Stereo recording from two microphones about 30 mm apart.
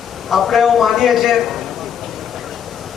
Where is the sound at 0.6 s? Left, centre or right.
Centre.